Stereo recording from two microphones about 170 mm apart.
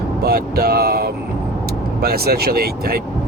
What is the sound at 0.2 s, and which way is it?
Speech, 65° right (ahead or behind).